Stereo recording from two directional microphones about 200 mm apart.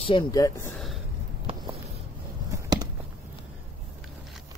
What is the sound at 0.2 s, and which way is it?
Speech, 15° left (ahead or behind).